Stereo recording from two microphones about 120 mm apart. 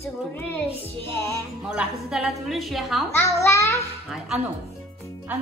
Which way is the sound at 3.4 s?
25° left (ahead or behind).